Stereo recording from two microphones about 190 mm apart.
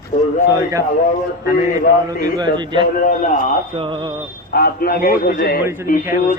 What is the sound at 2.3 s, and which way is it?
A man's voice, 25° right (ahead or behind).